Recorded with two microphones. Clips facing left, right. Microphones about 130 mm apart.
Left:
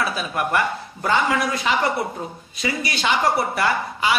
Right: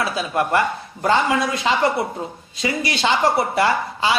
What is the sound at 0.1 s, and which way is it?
A woman's voice, 25° right (ahead or behind).